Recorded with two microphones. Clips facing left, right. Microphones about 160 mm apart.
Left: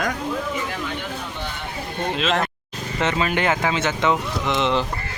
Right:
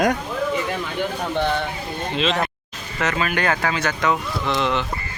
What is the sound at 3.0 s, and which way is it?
Speech, 25° left (ahead or behind).